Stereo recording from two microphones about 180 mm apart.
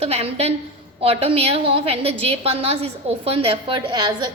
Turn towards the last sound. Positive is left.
turn(degrees=-25)  # may be behind; listen again after turning